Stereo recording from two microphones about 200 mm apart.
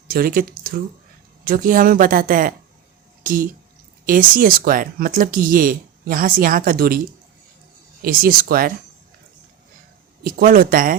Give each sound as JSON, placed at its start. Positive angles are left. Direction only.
{"t": 0.1, "sound": "speech", "side_deg": -45}
{"t": 8.0, "sound": "speech", "side_deg": -45}
{"t": 10.2, "sound": "speech", "side_deg": -45}